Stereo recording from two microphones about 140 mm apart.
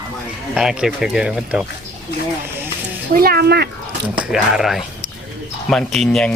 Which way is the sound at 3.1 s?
90° right.